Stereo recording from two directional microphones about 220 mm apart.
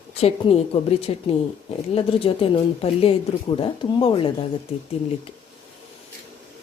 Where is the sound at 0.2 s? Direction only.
25° left (ahead or behind).